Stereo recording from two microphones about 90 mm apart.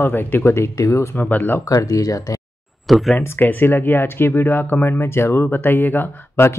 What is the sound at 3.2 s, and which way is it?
Speech, 20° left (ahead or behind).